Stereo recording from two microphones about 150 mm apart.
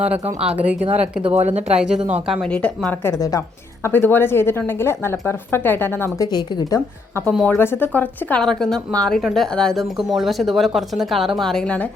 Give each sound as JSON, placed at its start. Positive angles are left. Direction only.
{"t": 0.0, "sound": "a woman's voice", "side_deg": -10}
{"t": 1.2, "sound": "speech", "side_deg": -45}
{"t": 1.7, "sound": "a woman's voice", "side_deg": -5}
{"t": 2.5, "sound": "a woman's voice", "side_deg": 10}
{"t": 6.3, "sound": "speech", "side_deg": 25}
{"t": 7.3, "sound": "a woman's voice", "side_deg": 5}